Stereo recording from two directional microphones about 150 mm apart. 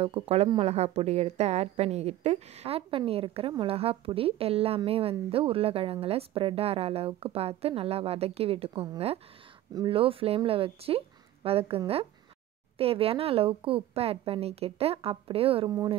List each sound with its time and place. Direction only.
0.0 s a woman's voice: 40° right (ahead or behind)